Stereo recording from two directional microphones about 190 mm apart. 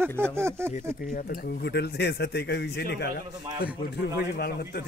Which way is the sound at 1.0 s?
45° left (ahead or behind).